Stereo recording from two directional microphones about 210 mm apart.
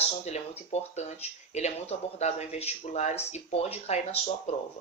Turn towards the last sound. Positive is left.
turn(degrees=30)  # may be behind; listen again after turning